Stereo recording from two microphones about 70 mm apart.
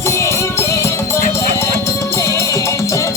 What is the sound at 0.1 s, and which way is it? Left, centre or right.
Music, left.